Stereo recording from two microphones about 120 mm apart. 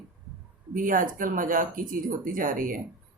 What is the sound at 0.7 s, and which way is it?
Speech, 90° right.